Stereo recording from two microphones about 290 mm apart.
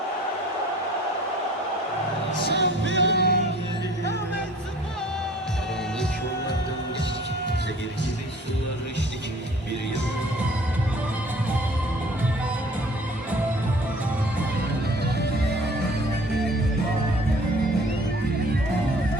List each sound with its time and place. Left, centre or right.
2.5 s music: left